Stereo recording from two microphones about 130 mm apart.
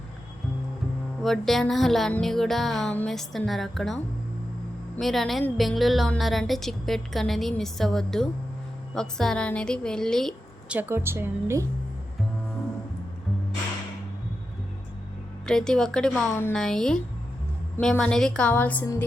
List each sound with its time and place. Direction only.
1.2 s speech: centre (ahead or behind)
10.7 s a woman's voice: 15° right (ahead or behind)
15.4 s speech: 5° left (ahead or behind)
16.3 s a woman's voice: 20° left (ahead or behind)
16.6 s a woman's voice: 5° left (ahead or behind)